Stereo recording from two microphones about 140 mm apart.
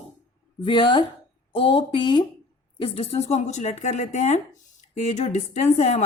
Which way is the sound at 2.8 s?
45° left (ahead or behind).